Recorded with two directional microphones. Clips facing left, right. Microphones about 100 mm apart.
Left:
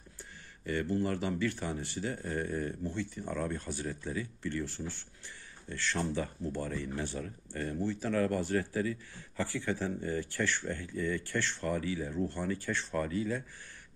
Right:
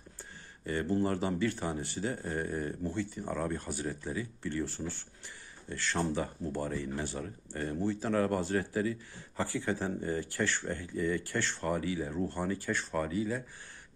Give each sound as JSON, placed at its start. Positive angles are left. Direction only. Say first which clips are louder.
{"t": 0.7, "sound": "speech", "louder": "right 1 dB", "side_deg": -30}
{"t": 2.9, "sound": "speech", "louder": "right 2 dB", "side_deg": -10}
{"t": 4.6, "sound": "speech", "louder": "right 2 dB", "side_deg": -45}
{"t": 5.7, "sound": "speech", "louder": "right 2 dB", "side_deg": -25}
{"t": 7.8, "sound": "speech", "louder": "right 2 dB", "side_deg": -15}
{"t": 8.1, "sound": "speech", "louder": "even", "side_deg": -30}